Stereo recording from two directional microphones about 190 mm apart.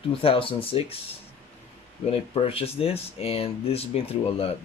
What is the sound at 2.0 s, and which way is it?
Speech, 30° left (ahead or behind).